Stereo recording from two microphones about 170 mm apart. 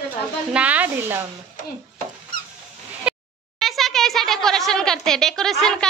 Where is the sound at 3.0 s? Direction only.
Centre (ahead or behind).